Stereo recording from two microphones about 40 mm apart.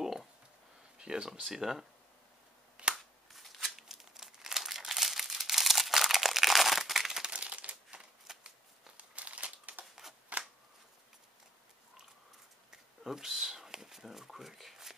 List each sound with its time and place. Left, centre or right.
0.0 s a sound: centre
0.9 s speech: right
1.5 s speech: centre
2.9 s crumpling: centre
7.2 s crumpling: right
8.3 s scissors: centre
8.9 s crumpling: right
10.3 s shuffling cards: right
12.7 s a sound: centre